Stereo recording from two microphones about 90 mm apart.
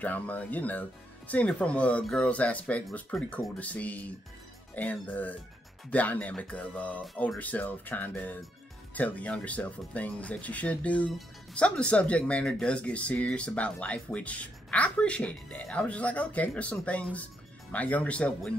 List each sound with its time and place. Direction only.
0.0 s speech: 15° left (ahead or behind)